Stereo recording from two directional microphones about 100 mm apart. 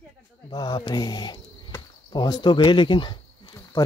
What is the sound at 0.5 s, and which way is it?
Speech, 45° left (ahead or behind).